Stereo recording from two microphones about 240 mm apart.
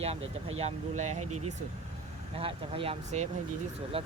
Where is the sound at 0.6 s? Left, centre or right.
Right.